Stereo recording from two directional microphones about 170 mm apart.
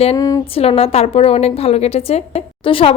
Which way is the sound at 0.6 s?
35° left (ahead or behind).